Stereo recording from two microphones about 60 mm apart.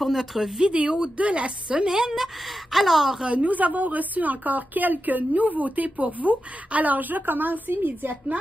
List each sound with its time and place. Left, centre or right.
0.0 s a woman's voice: centre
3.3 s a woman's voice: right